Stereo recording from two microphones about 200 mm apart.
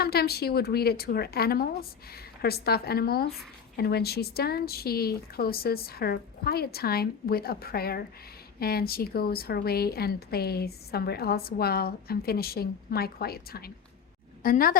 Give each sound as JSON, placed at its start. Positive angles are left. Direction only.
{"t": 0.0, "sound": "a woman's voice", "side_deg": 50}